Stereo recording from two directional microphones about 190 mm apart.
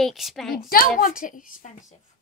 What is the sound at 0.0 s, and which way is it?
Speech, centre (ahead or behind).